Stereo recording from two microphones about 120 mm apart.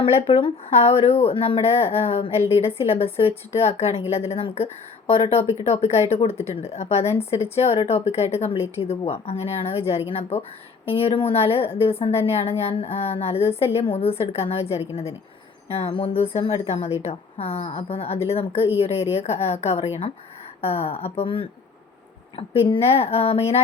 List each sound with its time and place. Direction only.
0.2 s a woman's voice: 60° left (ahead or behind)